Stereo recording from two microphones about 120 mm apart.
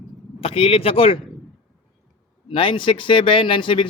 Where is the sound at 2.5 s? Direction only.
45° left (ahead or behind).